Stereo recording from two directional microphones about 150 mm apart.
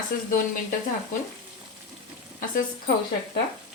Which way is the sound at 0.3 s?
65° left (ahead or behind).